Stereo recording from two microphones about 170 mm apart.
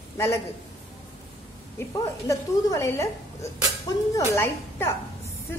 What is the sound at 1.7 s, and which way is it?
A woman's voice, 20° left (ahead or behind).